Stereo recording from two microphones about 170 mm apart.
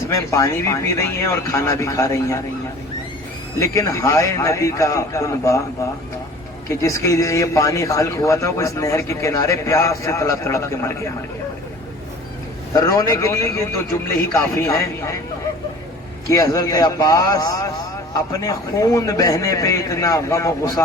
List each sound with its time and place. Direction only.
0.1 s a man's voice: 20° left (ahead or behind)
3.6 s a man's voice: 20° left (ahead or behind)
6.7 s a man's voice: 20° left (ahead or behind)
12.7 s a man's voice: 20° left (ahead or behind)
16.3 s a man's voice: 20° left (ahead or behind)